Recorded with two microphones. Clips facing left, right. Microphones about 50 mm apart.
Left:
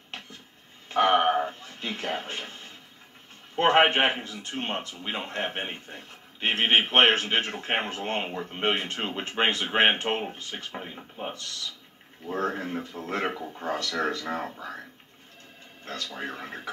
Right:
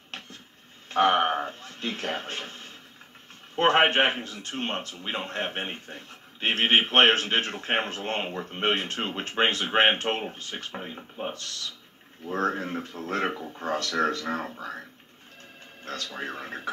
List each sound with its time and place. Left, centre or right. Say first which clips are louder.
0.8 s speech: even; left
1.2 s a sound: left 2 dB; centre
1.8 s speech: even; left
3.5 s speech: even; centre
8.7 s speech: right 1 dB; left
10.7 s speech: right 1 dB; centre
12.3 s speech: right 2 dB; right
12.7 s speech: right 1 dB; left
13.3 s speech: right 1 dB; centre
16.2 s speech: right 1 dB; centre